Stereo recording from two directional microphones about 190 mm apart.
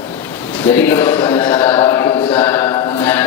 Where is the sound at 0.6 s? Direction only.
10° left (ahead or behind).